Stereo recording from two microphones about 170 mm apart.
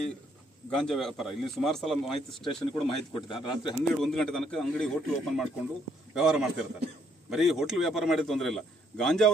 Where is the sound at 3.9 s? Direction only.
Centre (ahead or behind).